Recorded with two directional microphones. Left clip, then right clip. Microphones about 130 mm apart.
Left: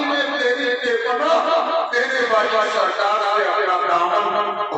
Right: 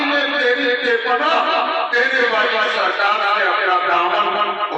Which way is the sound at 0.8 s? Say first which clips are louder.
Even; 20° left (ahead or behind).